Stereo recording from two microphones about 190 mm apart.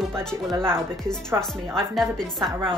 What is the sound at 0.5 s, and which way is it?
Speech, 15° right (ahead or behind).